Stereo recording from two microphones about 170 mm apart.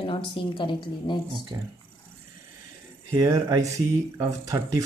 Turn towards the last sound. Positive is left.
turn(degrees=-20)  # may be behind; listen again after turning